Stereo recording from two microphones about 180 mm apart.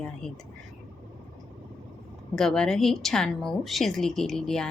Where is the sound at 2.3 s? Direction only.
5° left (ahead or behind).